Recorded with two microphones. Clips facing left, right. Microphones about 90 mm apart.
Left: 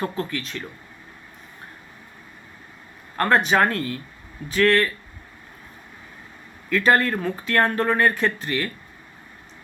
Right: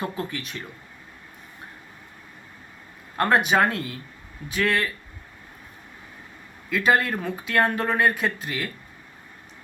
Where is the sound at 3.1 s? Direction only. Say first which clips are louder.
Left 1 dB; 10° right (ahead or behind).